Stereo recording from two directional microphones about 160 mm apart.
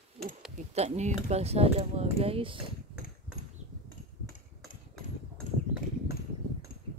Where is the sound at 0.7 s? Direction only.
45° right (ahead or behind).